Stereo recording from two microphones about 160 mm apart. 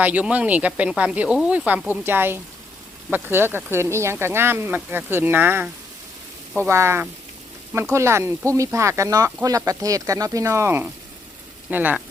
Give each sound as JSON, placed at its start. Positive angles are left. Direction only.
{"t": 0.0, "sound": "speech", "side_deg": -10}
{"t": 6.7, "sound": "speech", "side_deg": -15}